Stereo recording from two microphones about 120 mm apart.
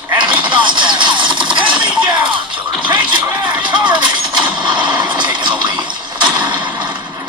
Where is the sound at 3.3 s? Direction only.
40° right (ahead or behind).